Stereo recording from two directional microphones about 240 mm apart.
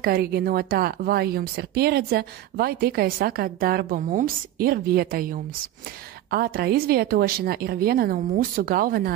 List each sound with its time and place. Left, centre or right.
0.0 s speech: right